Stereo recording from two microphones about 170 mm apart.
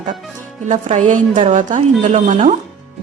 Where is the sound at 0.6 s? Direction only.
45° right (ahead or behind).